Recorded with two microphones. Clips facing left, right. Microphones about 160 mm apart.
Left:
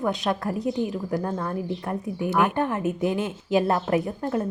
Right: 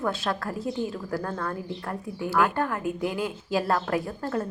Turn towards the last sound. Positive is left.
turn(degrees=20)  # may be behind; listen again after turning